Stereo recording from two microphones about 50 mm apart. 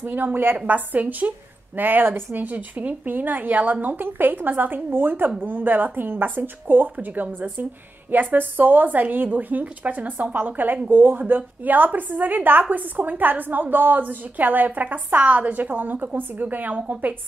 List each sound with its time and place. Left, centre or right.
0.0 s a woman's voice: right
0.7 s a woman's voice: right